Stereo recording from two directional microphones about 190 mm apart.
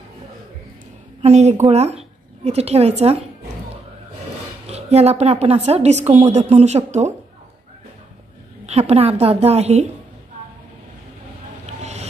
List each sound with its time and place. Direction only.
1.2 s a woman's voice: 35° right (ahead or behind)
4.6 s a woman's voice: 35° right (ahead or behind)
8.6 s a woman's voice: 35° right (ahead or behind)
11.6 s a sound: 35° right (ahead or behind)